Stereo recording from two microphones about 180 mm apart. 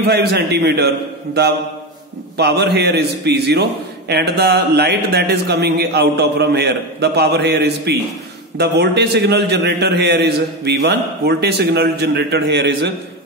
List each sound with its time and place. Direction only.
0.0 s a man's voice: 65° right (ahead or behind)